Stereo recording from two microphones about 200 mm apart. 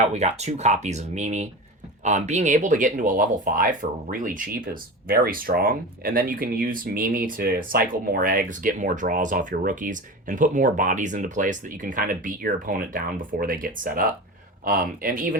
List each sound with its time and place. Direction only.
0.0 s speech: 35° right (ahead or behind)